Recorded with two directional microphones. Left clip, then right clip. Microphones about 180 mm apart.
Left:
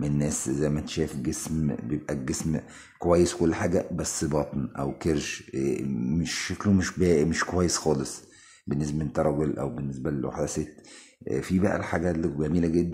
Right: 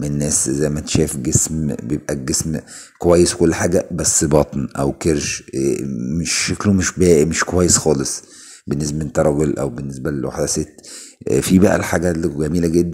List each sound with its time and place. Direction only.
0.0 s speech: 25° right (ahead or behind)
11.2 s speech: 35° right (ahead or behind)